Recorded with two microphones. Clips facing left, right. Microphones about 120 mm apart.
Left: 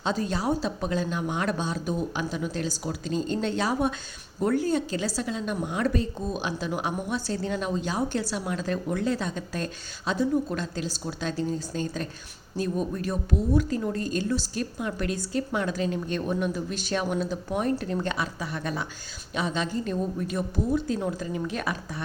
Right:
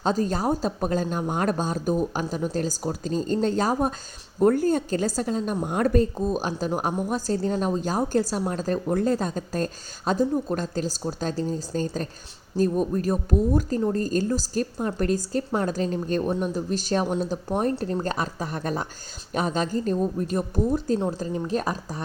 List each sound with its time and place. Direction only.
0.0 s a woman's voice: 40° right (ahead or behind)